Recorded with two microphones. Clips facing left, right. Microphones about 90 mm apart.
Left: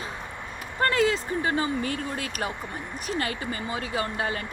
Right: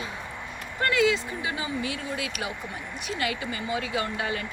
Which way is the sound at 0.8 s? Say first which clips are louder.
Even; 40° left (ahead or behind).